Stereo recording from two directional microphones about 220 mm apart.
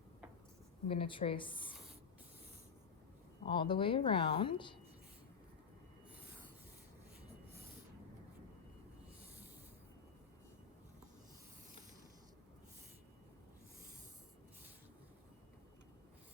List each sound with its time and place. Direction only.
0.9 s a woman's voice: 25° left (ahead or behind)
3.4 s a woman's voice: 20° left (ahead or behind)